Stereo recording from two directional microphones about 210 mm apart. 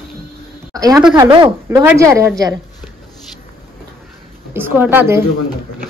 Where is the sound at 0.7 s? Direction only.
15° right (ahead or behind).